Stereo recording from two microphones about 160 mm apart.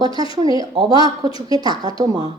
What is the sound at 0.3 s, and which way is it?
A woman's voice, 25° right (ahead or behind).